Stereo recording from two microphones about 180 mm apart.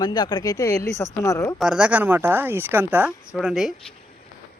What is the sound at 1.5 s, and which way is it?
A woman's voice, 5° right (ahead or behind).